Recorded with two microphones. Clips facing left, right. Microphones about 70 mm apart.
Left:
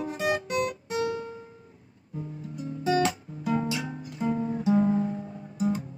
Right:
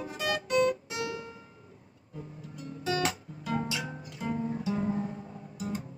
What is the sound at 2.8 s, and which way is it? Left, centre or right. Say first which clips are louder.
Guitar: left 6 dB; left.